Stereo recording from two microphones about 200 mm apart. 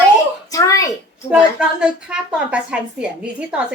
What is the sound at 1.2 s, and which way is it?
A woman's voice, 5° right (ahead or behind).